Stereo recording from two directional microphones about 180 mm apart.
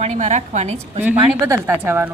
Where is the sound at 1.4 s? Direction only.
15° right (ahead or behind).